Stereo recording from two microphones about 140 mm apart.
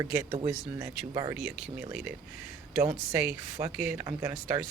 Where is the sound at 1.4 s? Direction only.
10° right (ahead or behind).